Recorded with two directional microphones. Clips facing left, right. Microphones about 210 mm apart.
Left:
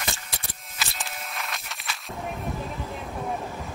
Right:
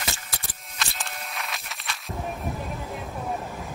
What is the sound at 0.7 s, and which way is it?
Music, centre (ahead or behind).